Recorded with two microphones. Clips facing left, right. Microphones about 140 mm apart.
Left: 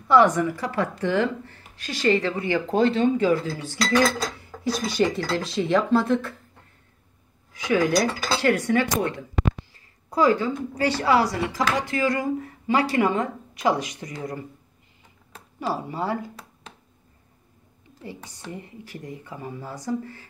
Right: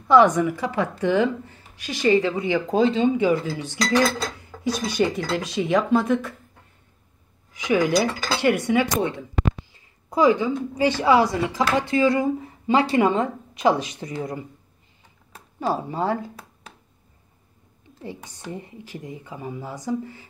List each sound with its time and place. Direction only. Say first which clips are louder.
0.1 s speech: right 2 dB; 15° right (ahead or behind)
4.1 s speech: even; 5° left (ahead or behind)
4.8 s speech: even; 15° right (ahead or behind)
7.7 s speech: right 1 dB; 5° right (ahead or behind)
8.4 s a woman's voice: right 2 dB; 15° right (ahead or behind)
15.7 s speech: right 3 dB; 20° right (ahead or behind)
18.0 s speech: right 2 dB; 20° right (ahead or behind)